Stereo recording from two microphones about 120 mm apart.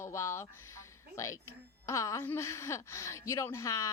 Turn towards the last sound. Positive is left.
turn(degrees=25)  # may be behind; listen again after turning